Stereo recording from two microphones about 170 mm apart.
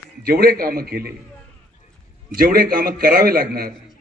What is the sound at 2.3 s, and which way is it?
A man's voice, 60° right (ahead or behind).